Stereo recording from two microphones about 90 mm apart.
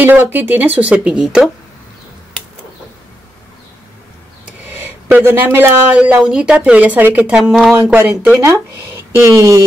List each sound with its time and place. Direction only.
0.0 s speech: 20° right (ahead or behind)
4.5 s speech: 20° right (ahead or behind)
8.4 s speech: 30° right (ahead or behind)